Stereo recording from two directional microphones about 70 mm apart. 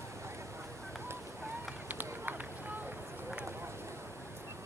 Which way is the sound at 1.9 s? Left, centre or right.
Right.